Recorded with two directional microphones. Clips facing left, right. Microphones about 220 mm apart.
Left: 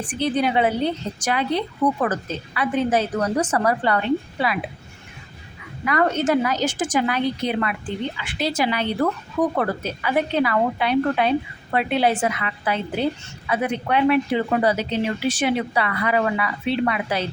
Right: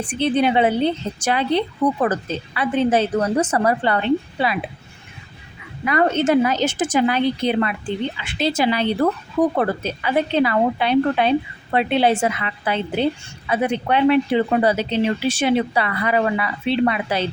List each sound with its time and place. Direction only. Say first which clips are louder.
0.0 s speech: right 3 dB; 25° right (ahead or behind)
5.8 s speech: right 2 dB; 25° right (ahead or behind)